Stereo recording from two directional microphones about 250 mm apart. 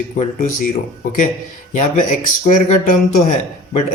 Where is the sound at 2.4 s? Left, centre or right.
Left.